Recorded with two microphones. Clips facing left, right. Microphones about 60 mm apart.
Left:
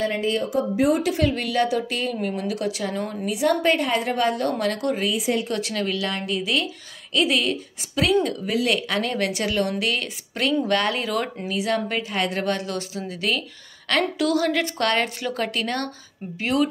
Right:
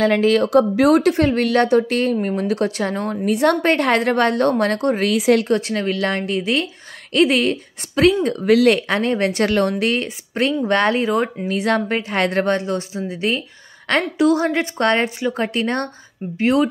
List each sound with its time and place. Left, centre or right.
0.0 s speech: right
1.0 s a woman's voice: right
5.0 s speech: right
5.5 s speech: right
9.3 s a woman's voice: right
11.4 s a woman's voice: right